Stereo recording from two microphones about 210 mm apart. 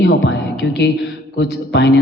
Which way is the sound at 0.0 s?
55° left (ahead or behind).